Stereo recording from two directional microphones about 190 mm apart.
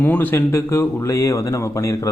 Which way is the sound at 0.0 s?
10° left (ahead or behind).